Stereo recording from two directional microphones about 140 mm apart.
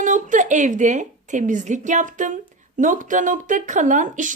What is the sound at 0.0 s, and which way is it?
A woman's voice, 65° right (ahead or behind).